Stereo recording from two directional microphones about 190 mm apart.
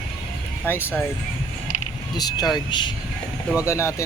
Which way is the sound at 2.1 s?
20° left (ahead or behind).